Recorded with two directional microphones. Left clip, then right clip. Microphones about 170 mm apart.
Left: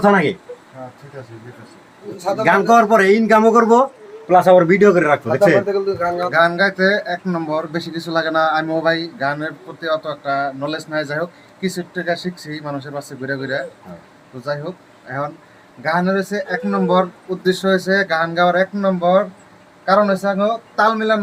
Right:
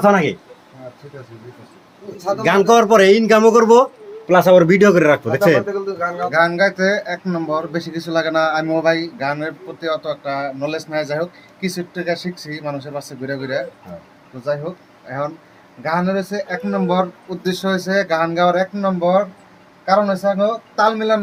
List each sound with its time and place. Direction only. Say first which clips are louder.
0.0 s speech: even; 40° right (ahead or behind)
2.4 s a man's voice: even; 65° right (ahead or behind)
6.3 s speech: even; 15° right (ahead or behind)
15.8 s speech: left 1 dB; 20° right (ahead or behind)